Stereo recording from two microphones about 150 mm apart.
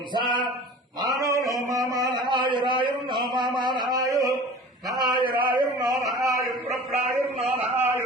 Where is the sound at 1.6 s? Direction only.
20° right (ahead or behind).